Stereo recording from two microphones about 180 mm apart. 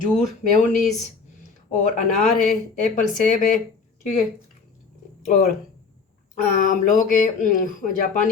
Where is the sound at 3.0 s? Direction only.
45° left (ahead or behind).